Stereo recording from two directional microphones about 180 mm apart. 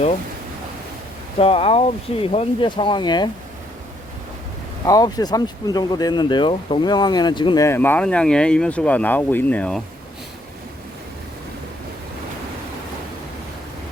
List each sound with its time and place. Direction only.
1.4 s speech: 30° left (ahead or behind)
4.9 s speech: 20° left (ahead or behind)